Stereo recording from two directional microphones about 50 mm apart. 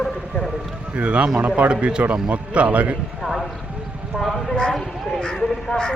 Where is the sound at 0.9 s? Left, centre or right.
Right.